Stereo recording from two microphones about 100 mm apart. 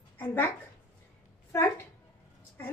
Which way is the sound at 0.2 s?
25° left (ahead or behind).